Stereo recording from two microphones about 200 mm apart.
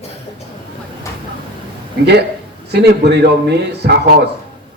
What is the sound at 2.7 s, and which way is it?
A man's voice, 55° right (ahead or behind).